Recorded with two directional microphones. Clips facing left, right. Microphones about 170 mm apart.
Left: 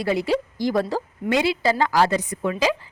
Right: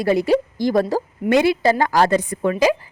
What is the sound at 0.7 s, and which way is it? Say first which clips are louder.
A woman's voice: right 4 dB; 40° right (ahead or behind).